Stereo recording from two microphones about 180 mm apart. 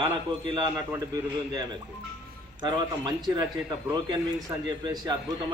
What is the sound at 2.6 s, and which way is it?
Speech, 25° right (ahead or behind).